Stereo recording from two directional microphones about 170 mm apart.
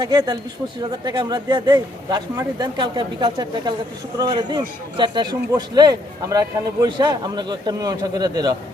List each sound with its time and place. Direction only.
0.0 s speech: 25° right (ahead or behind)